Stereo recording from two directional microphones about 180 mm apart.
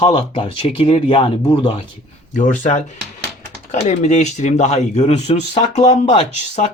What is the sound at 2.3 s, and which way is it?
Speech, 45° left (ahead or behind).